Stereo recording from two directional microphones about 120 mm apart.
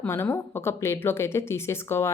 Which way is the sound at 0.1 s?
20° left (ahead or behind).